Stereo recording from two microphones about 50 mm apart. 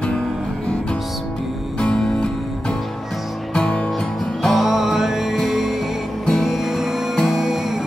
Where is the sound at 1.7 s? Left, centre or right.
Centre.